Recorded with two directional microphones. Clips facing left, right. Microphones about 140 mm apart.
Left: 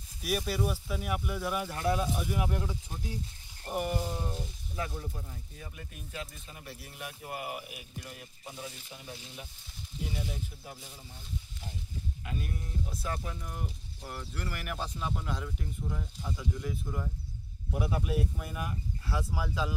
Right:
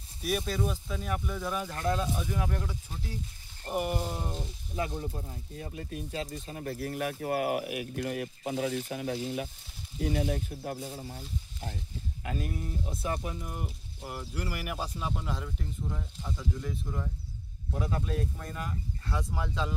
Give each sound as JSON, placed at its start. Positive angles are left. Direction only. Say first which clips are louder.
{"t": 0.2, "sound": "speech", "louder": "right 1 dB", "side_deg": 0}
{"t": 3.7, "sound": "speech", "louder": "right 1 dB", "side_deg": -10}
{"t": 6.6, "sound": "speech", "louder": "right 12 dB", "side_deg": -55}
{"t": 10.0, "sound": "speech", "louder": "right 9 dB", "side_deg": -60}
{"t": 11.1, "sound": "speech", "louder": "right 4 dB", "side_deg": -65}
{"t": 12.8, "sound": "speech", "louder": "right 3 dB", "side_deg": -25}